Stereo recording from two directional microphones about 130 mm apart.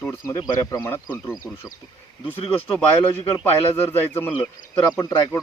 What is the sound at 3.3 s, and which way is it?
A man's voice, 15° left (ahead or behind).